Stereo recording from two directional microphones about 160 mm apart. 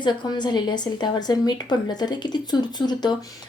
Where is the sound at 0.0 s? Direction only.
30° left (ahead or behind).